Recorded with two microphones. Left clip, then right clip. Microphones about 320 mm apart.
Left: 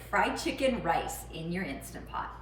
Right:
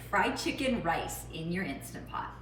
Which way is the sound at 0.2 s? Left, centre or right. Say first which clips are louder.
Left 2 dB; left.